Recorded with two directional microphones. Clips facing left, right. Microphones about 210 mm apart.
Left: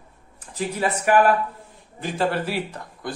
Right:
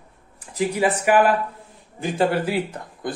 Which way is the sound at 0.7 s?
10° right (ahead or behind).